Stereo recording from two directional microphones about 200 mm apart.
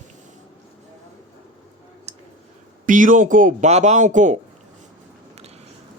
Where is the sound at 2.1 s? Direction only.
30° right (ahead or behind).